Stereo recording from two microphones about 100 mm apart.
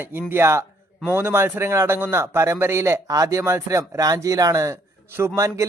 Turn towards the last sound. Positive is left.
turn(degrees=-30)  # may be behind; listen again after turning